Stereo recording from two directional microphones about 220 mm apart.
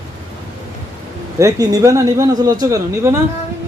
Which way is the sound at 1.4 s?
15° right (ahead or behind).